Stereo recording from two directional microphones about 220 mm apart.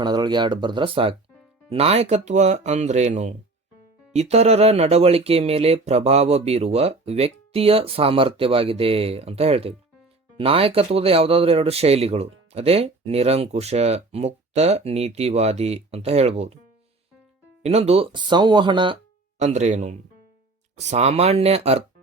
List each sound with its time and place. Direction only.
0.0 s speech: 20° right (ahead or behind)
17.6 s speech: 30° right (ahead or behind)
19.4 s speech: 30° right (ahead or behind)